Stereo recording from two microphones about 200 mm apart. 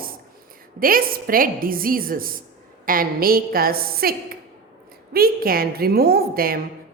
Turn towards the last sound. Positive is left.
turn(degrees=-50)  # may be behind; listen again after turning